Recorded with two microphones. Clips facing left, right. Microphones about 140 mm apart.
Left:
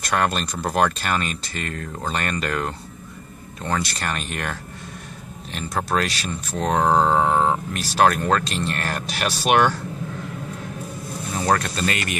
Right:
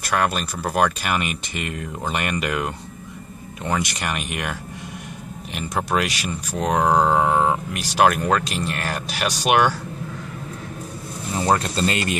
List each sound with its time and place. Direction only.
0.0 s speech: 5° right (ahead or behind)
11.3 s speech: 20° right (ahead or behind)